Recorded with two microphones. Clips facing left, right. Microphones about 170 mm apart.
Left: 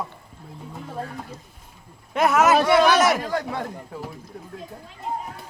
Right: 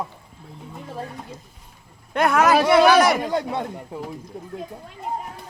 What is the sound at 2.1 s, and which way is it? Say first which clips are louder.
Speech: even; centre (ahead or behind).